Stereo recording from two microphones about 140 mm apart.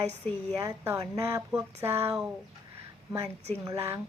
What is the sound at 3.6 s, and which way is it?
Speech, 20° right (ahead or behind).